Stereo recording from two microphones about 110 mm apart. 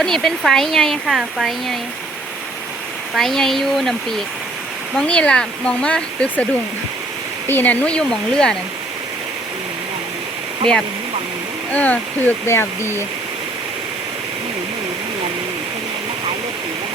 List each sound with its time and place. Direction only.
0.0 s speech: 5° left (ahead or behind)
3.2 s speech: centre (ahead or behind)
11.7 s speech: 15° left (ahead or behind)